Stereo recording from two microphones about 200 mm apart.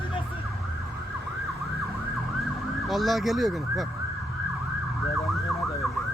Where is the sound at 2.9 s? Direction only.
Centre (ahead or behind).